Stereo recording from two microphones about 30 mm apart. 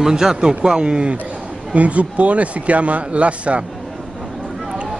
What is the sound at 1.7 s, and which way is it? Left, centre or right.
Speech, right.